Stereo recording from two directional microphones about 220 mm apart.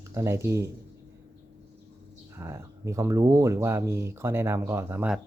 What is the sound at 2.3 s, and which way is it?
Speech, 15° right (ahead or behind).